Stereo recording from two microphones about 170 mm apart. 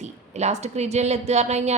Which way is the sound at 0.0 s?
40° right (ahead or behind).